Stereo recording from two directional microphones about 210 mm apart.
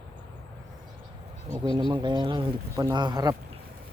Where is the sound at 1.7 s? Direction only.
20° right (ahead or behind).